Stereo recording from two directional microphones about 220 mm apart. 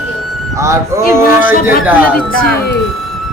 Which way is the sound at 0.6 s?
15° right (ahead or behind).